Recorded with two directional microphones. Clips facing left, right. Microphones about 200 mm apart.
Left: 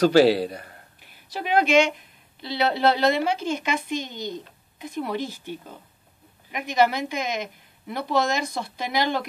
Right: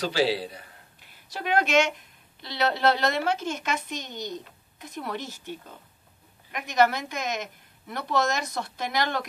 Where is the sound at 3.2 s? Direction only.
15° left (ahead or behind).